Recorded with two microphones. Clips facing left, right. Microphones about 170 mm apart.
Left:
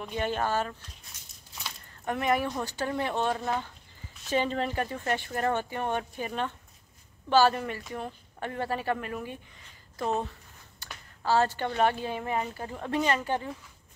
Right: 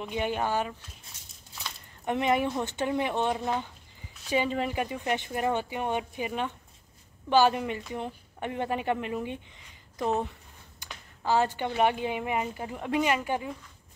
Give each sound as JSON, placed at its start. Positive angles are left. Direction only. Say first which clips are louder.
{"t": 0.0, "sound": "speech", "louder": "even", "side_deg": -15}
{"t": 2.0, "sound": "speech", "louder": "right 2 dB", "side_deg": -20}
{"t": 10.8, "sound": "speech", "louder": "even", "side_deg": -15}